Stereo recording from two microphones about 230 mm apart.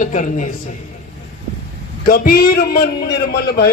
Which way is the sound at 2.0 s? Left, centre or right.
Left.